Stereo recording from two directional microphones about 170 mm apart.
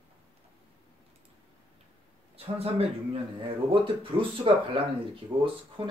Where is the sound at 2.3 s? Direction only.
35° right (ahead or behind).